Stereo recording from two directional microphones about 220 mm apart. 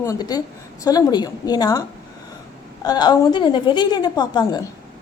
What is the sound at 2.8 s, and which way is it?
A woman's voice, 20° left (ahead or behind).